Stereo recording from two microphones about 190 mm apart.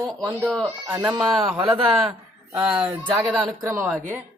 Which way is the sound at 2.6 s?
5° right (ahead or behind).